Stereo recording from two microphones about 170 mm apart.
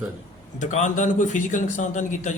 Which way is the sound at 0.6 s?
45° left (ahead or behind).